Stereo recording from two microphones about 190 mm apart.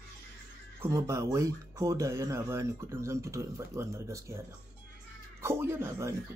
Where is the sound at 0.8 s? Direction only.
15° right (ahead or behind).